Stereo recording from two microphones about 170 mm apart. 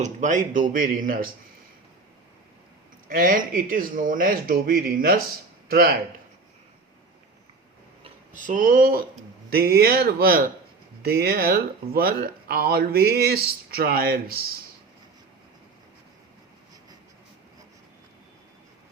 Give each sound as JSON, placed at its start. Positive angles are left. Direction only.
{"t": 0.0, "sound": "speech", "side_deg": -45}
{"t": 3.1, "sound": "speech", "side_deg": -55}
{"t": 8.3, "sound": "speech", "side_deg": -50}
{"t": 9.5, "sound": "speech", "side_deg": -70}